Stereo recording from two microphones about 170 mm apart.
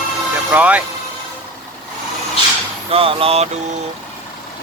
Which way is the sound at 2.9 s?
35° right (ahead or behind).